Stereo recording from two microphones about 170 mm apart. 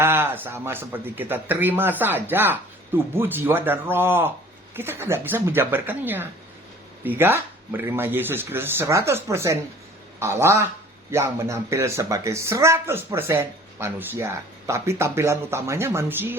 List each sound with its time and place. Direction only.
0.0 s speech: 15° right (ahead or behind)